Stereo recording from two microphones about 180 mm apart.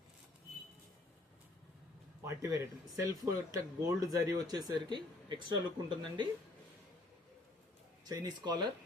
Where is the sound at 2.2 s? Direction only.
15° right (ahead or behind).